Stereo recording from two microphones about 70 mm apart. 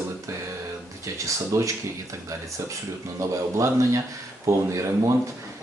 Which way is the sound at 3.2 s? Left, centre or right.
Right.